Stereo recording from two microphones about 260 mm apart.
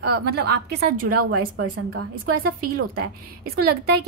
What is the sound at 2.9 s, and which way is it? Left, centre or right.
A woman's voice, right.